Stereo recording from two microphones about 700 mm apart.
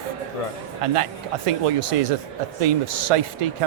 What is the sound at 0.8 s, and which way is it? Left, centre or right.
Speech, right.